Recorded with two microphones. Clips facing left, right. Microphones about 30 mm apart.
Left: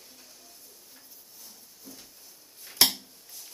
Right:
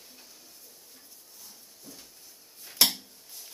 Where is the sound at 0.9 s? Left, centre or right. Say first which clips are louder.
Even; centre.